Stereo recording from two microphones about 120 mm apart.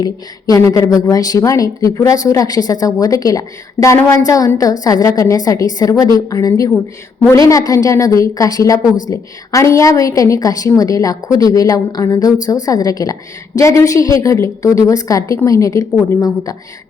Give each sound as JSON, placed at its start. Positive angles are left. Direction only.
{"t": 0.0, "sound": "a woman's voice", "side_deg": 30}